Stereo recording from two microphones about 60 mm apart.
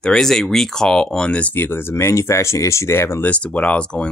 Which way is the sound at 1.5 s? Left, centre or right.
Left.